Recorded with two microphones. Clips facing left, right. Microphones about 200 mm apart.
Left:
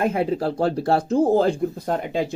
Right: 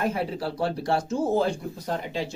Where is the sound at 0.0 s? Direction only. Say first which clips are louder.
Left 6 dB; 50° left (ahead or behind).